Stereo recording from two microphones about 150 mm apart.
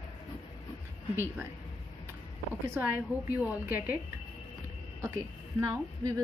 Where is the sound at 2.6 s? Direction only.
10° right (ahead or behind).